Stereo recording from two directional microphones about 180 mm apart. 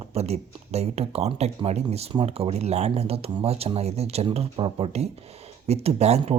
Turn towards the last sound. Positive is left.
turn(degrees=-35)  # may be behind; listen again after turning